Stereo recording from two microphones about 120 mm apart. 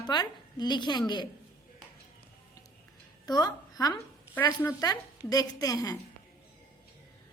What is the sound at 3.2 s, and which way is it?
Speech, 35° left (ahead or behind).